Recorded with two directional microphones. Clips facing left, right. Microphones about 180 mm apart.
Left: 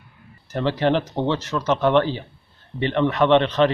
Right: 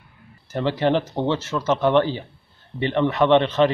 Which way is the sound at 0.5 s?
25° right (ahead or behind).